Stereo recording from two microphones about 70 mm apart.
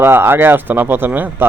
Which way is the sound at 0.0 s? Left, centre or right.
Right.